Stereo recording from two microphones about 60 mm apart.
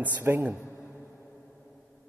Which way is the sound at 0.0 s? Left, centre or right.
Right.